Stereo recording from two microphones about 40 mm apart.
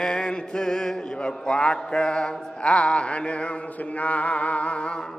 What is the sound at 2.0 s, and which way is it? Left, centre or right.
Mantra, left.